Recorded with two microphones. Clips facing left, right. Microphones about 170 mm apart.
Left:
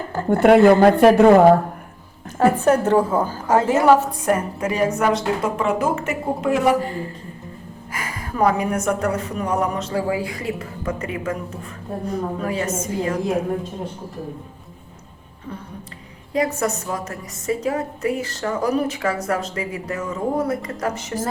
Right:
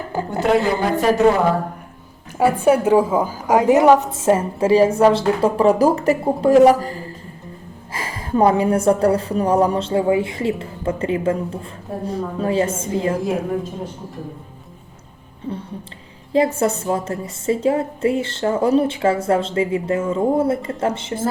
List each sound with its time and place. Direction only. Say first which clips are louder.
0.3 s speech: left 7 dB; 60° left (ahead or behind)
2.4 s a woman's voice: right 1 dB; 10° right (ahead or behind); by 6.9 s 35° right (ahead or behind)
7.9 s a woman's voice: right 5 dB; 30° right (ahead or behind)
15.5 s a woman's voice: right 5 dB; 25° right (ahead or behind)